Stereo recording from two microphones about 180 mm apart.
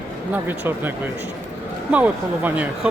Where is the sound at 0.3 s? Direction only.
10° right (ahead or behind).